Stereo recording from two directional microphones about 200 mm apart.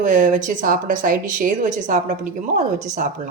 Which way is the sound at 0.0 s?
40° right (ahead or behind).